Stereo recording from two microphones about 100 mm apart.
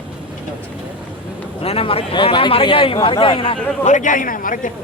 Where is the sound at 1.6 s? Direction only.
75° left (ahead or behind).